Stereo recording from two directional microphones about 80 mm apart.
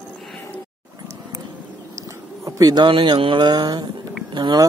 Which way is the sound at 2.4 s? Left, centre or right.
Right.